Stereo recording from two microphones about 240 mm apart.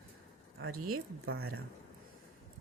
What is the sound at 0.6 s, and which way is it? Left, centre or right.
Speech, right.